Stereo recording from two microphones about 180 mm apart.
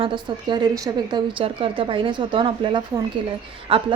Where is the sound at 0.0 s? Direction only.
25° right (ahead or behind).